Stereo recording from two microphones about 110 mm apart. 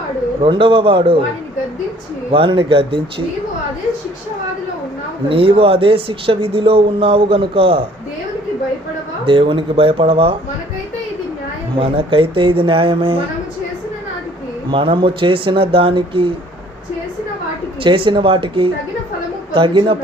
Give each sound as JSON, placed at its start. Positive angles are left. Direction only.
{"t": 0.4, "sound": "speech", "side_deg": -50}
{"t": 2.3, "sound": "speech", "side_deg": -55}
{"t": 5.3, "sound": "speech", "side_deg": -60}
{"t": 9.2, "sound": "speech", "side_deg": -55}
{"t": 11.8, "sound": "speech", "side_deg": -55}
{"t": 14.7, "sound": "speech", "side_deg": -50}
{"t": 17.8, "sound": "speech", "side_deg": -50}